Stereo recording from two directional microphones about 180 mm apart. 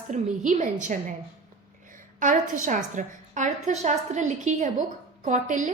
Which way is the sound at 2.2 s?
45° right (ahead or behind).